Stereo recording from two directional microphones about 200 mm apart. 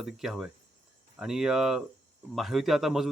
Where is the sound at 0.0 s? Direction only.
Centre (ahead or behind).